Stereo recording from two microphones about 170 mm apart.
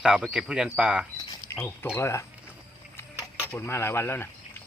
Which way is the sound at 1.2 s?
15° left (ahead or behind).